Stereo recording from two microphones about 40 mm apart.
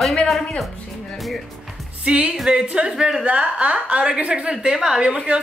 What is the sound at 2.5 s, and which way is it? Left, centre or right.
Speech, right.